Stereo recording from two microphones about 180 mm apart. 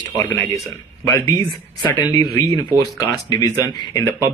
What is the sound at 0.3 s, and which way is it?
Speech, 10° left (ahead or behind).